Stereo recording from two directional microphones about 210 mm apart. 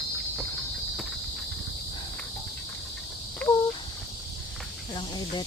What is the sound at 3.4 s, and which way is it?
Cricket, 5° left (ahead or behind).